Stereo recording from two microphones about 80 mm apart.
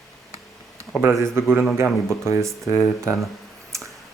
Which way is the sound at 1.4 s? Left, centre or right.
Right.